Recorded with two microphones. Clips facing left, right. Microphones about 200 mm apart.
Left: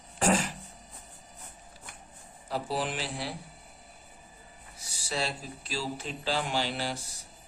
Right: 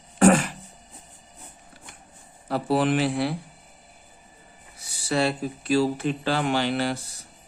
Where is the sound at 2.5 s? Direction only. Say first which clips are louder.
Right 10 dB; 65° right (ahead or behind).